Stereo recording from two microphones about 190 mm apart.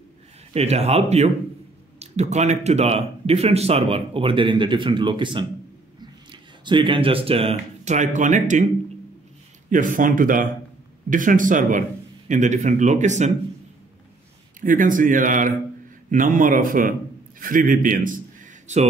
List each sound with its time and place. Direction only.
0.5 s speech: 35° right (ahead or behind)
9.7 s speech: 45° right (ahead or behind)
14.6 s a man's voice: 45° right (ahead or behind)